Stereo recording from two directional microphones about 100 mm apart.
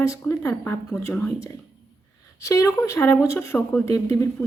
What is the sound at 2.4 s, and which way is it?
A woman's voice, 30° left (ahead or behind).